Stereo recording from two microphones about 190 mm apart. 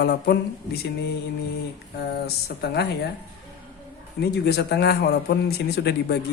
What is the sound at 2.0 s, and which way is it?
Speech, 60° left (ahead or behind).